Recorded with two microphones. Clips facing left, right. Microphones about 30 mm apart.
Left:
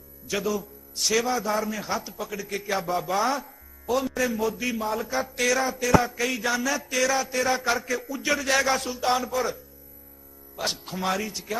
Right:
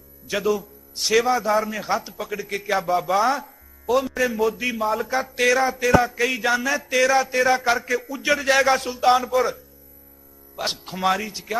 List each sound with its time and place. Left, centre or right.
0.3 s a man's voice: centre
2.6 s a man's voice: centre
10.6 s speech: centre
11.0 s a man's voice: centre
11.3 s speech: right